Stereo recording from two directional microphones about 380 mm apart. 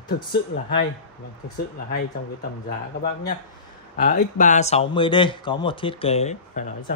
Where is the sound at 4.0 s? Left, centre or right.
Centre.